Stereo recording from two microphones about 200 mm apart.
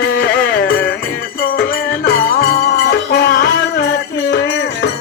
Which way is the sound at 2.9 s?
50° left (ahead or behind).